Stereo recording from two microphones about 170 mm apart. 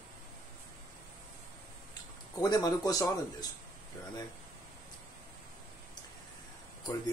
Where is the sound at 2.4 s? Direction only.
25° left (ahead or behind).